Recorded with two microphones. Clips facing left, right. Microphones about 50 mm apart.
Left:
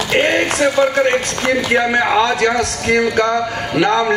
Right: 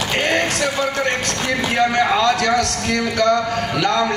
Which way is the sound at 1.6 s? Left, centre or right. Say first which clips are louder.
Right 1 dB; centre.